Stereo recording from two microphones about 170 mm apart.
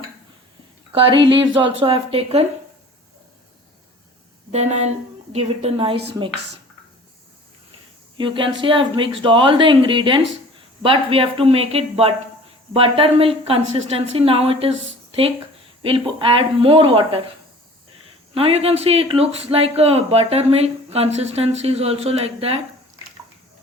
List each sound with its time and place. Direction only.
0.9 s speech: 30° right (ahead or behind)
4.5 s speech: 40° right (ahead or behind)
8.2 s speech: 30° right (ahead or behind)
15.8 s speech: 30° right (ahead or behind)
18.3 s speech: 35° right (ahead or behind)